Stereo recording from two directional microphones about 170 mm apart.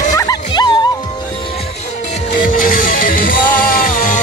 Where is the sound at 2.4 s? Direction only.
55° left (ahead or behind).